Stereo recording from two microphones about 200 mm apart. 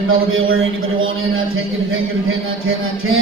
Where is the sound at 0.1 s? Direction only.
90° right.